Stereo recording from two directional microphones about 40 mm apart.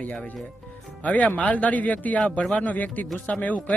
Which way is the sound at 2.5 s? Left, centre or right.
Left.